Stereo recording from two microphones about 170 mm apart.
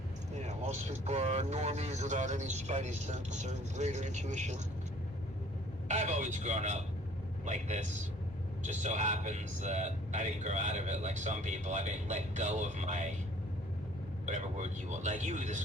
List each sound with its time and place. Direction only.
0.3 s a man's voice: 40° right (ahead or behind)
5.9 s a man's voice: 45° right (ahead or behind)
14.3 s a man's voice: 45° right (ahead or behind)